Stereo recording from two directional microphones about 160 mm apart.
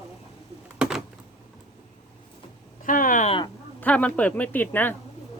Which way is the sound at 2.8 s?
55° left (ahead or behind).